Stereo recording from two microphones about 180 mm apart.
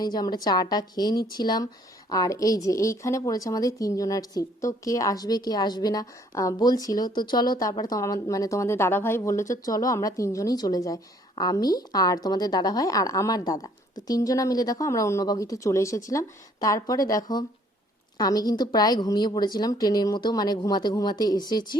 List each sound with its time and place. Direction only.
0.0 s a woman's voice: 25° left (ahead or behind)